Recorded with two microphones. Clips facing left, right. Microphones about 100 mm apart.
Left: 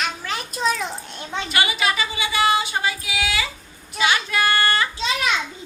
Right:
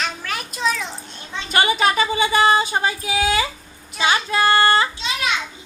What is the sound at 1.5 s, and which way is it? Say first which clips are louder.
Female singing: right 5 dB; 40° right (ahead or behind).